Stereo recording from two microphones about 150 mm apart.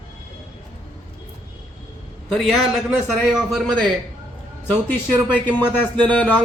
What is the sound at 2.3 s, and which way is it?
Speech, centre (ahead or behind).